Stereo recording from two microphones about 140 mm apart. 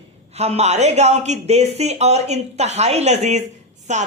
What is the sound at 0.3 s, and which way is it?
Speech, 50° right (ahead or behind).